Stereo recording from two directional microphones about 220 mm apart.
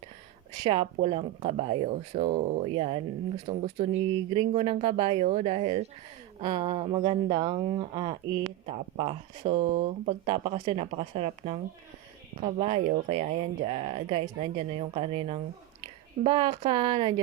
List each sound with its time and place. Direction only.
0.6 s speech: 25° right (ahead or behind)